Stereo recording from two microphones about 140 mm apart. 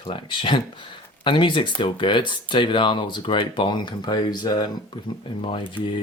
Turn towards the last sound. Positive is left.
turn(degrees=35)  # may be behind; listen again after turning